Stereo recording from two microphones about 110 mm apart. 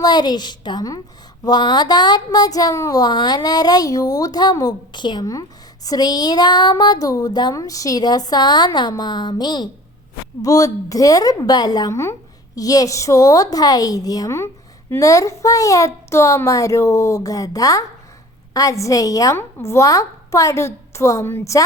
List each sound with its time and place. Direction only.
0.0 s a woman's voice: 40° left (ahead or behind)